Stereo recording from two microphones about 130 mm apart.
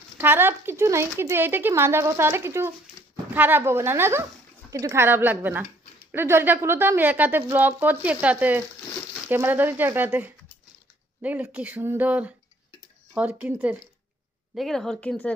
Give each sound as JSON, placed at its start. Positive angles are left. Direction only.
{"t": 0.2, "sound": "a woman's voice", "side_deg": -15}
{"t": 14.5, "sound": "speech", "side_deg": 0}